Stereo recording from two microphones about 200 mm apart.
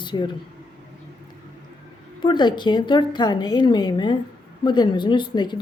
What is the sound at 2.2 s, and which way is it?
A woman's voice, 20° left (ahead or behind).